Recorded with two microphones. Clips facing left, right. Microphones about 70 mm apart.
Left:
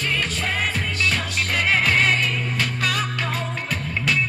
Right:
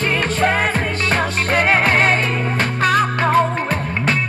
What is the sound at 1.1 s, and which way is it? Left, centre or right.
Music, right.